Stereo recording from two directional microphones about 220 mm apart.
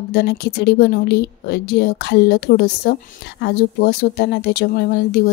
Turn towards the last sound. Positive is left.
turn(degrees=50)  # may be behind; listen again after turning